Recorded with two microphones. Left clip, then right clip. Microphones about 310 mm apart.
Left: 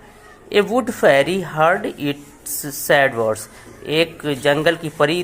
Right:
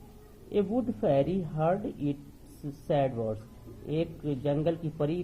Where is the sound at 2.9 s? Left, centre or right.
Left.